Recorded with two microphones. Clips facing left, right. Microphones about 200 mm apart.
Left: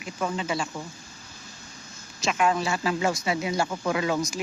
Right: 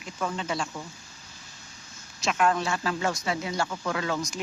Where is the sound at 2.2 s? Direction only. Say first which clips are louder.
Left 1 dB; centre (ahead or behind).